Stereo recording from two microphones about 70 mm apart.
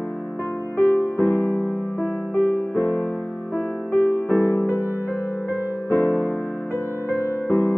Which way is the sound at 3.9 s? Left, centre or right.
Left.